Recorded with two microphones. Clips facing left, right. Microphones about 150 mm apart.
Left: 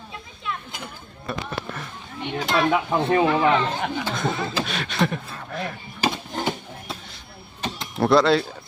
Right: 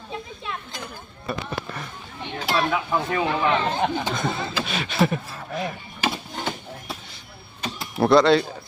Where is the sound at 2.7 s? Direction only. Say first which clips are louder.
Left 4 dB; 25° left (ahead or behind).